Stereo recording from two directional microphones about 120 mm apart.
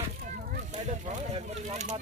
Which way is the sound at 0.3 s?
70° right (ahead or behind).